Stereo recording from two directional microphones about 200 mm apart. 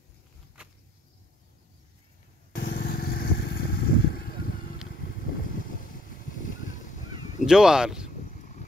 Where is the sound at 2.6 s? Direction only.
50° left (ahead or behind).